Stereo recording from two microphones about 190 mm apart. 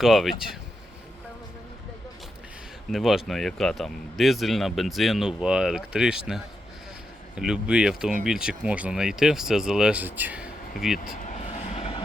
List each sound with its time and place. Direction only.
0.0 s speech: centre (ahead or behind)
2.9 s speech: centre (ahead or behind)
11.7 s train: 30° left (ahead or behind)